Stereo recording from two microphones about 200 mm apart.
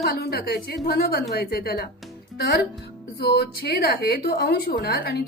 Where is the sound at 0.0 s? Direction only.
50° left (ahead or behind).